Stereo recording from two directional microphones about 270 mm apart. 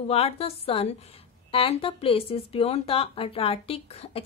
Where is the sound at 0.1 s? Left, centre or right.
Left.